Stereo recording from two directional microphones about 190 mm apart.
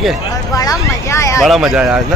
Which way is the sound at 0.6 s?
15° left (ahead or behind).